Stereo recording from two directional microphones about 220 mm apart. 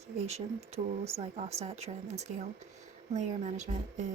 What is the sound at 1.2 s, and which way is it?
Speech, 30° right (ahead or behind).